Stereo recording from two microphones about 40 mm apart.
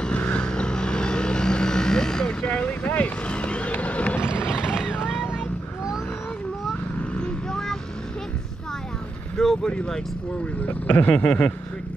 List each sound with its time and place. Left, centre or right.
0.0 s vehicle: left
2.4 s vehicle: left
3.7 s run: left
4.3 s a sound: centre
9.4 s vehicle: centre
10.6 s speech: left